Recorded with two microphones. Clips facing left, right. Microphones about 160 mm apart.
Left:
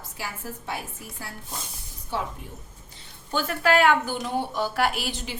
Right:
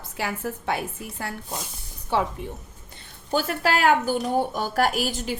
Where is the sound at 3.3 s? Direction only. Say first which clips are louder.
Left 1 dB; 35° right (ahead or behind).